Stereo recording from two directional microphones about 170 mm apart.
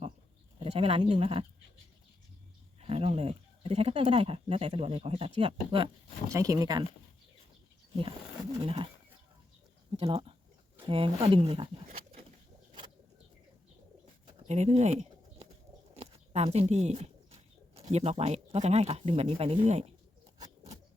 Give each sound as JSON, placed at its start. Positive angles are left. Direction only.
{"t": 0.6, "sound": "speech", "side_deg": -35}
{"t": 2.8, "sound": "speech", "side_deg": -35}
{"t": 6.3, "sound": "speech", "side_deg": -20}
{"t": 8.6, "sound": "speech", "side_deg": -30}
{"t": 10.0, "sound": "speech", "side_deg": -35}
{"t": 14.4, "sound": "bird", "side_deg": -40}
{"t": 16.0, "sound": "speech", "side_deg": -40}